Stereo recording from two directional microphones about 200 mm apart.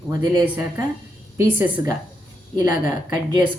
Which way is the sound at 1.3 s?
10° right (ahead or behind).